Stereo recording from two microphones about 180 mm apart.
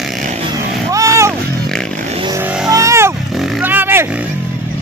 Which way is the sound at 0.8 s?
15° right (ahead or behind).